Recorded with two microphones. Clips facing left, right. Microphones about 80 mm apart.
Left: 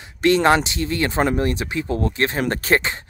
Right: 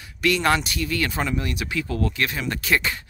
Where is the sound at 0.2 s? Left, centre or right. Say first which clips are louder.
Left 5 dB; left.